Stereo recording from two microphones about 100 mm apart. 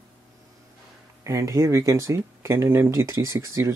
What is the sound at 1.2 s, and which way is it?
Speech, 35° right (ahead or behind).